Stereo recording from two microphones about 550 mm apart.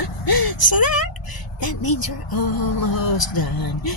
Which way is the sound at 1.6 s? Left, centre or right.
Left.